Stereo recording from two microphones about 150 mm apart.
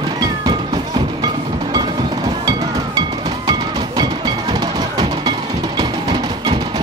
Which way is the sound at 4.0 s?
30° right (ahead or behind).